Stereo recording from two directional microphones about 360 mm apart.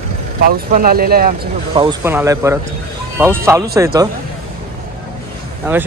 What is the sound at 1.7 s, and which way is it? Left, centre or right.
Speech, centre.